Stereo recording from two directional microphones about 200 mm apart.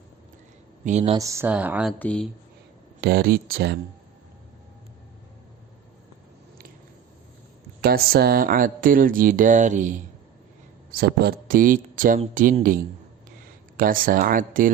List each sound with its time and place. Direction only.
0.9 s speech: 35° right (ahead or behind)
1.1 s speech: 15° right (ahead or behind)
2.0 s speech: 5° left (ahead or behind)
3.0 s speech: 50° right (ahead or behind)
7.8 s speech: 50° right (ahead or behind)
10.9 s speech: 50° right (ahead or behind)